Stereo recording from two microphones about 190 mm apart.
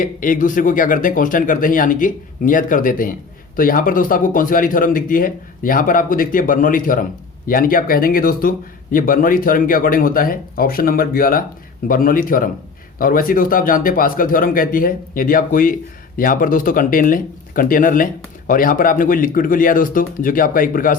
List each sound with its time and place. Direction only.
0.0 s speech: 45° left (ahead or behind)